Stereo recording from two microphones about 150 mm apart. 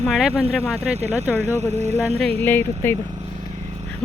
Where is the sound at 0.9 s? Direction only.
45° right (ahead or behind).